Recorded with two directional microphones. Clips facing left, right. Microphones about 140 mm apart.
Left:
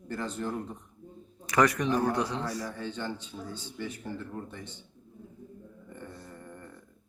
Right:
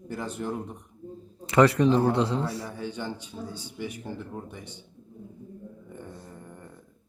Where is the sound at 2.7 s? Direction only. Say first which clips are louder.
Right 2 dB; 10° right (ahead or behind).